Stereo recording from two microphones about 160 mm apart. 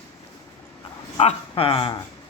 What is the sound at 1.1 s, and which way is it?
Speech, 40° left (ahead or behind).